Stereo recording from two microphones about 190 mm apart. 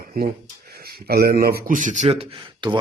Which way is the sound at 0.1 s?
50° right (ahead or behind).